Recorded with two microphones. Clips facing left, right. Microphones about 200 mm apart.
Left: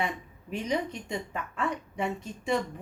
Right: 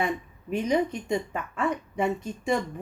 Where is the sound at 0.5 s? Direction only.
50° right (ahead or behind).